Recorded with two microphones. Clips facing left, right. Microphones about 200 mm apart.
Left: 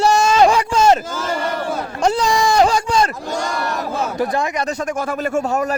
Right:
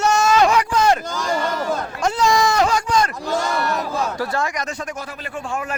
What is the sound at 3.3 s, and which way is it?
Speech, centre (ahead or behind).